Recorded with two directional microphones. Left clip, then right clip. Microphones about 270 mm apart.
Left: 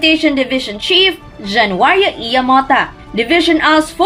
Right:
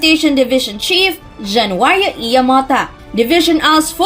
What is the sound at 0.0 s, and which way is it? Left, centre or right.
A woman's voice, right.